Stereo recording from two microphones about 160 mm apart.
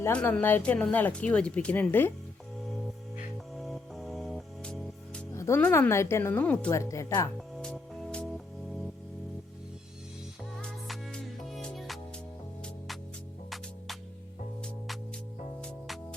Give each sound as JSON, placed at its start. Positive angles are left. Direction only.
{"t": 0.0, "sound": "speech", "side_deg": 10}
{"t": 3.6, "sound": "music", "side_deg": 0}
{"t": 5.3, "sound": "speech", "side_deg": 15}
{"t": 7.3, "sound": "music", "side_deg": 5}
{"t": 10.6, "sound": "music", "side_deg": 5}